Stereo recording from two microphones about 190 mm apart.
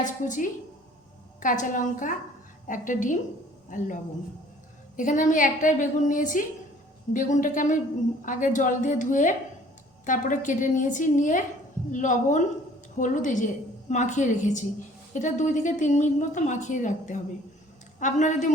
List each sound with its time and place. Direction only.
0.0 s a woman's voice: 40° left (ahead or behind)
4.9 s a woman's voice: 40° left (ahead or behind)